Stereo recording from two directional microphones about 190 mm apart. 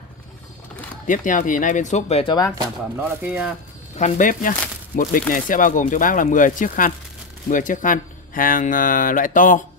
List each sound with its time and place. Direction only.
1.0 s speech: 45° left (ahead or behind)
2.5 s speech: 20° right (ahead or behind)
3.9 s speech: 40° left (ahead or behind)